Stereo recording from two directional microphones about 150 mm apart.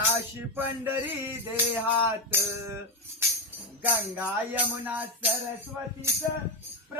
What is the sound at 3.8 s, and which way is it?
Music, 10° right (ahead or behind).